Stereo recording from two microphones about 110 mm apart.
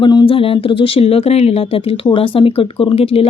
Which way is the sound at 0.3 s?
55° left (ahead or behind).